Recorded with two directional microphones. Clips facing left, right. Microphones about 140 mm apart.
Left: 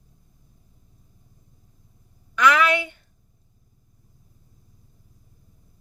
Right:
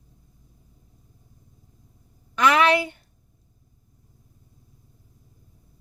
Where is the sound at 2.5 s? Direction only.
35° right (ahead or behind).